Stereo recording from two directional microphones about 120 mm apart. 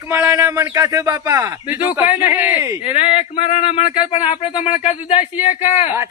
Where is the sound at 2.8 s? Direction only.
55° left (ahead or behind).